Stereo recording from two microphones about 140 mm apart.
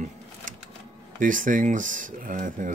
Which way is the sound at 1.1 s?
70° right (ahead or behind).